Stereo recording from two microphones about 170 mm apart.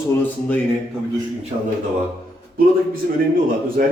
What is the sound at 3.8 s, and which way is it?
Speech, 55° right (ahead or behind).